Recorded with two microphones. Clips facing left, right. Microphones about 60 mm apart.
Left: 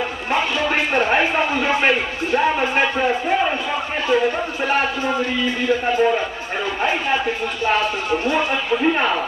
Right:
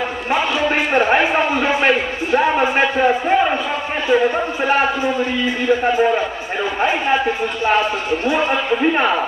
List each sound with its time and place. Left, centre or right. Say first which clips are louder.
0.3 s a man's voice: right 2 dB; centre
8.7 s speech: right 1 dB; centre